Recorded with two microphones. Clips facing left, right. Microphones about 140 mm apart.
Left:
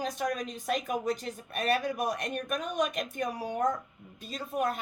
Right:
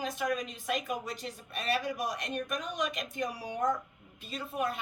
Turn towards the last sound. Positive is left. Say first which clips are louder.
# left 3 dB
turn(degrees=45)  # may be behind; listen again after turning